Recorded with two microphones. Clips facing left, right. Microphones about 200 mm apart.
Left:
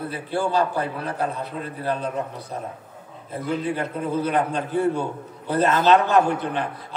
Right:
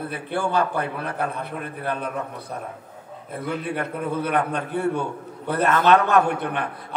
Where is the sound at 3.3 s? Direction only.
55° right (ahead or behind).